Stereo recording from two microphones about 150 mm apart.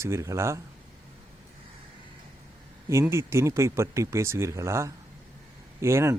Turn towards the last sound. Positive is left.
turn(degrees=-20)  # may be behind; listen again after turning